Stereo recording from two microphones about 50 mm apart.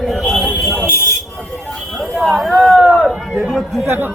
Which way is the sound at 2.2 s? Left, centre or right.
Centre.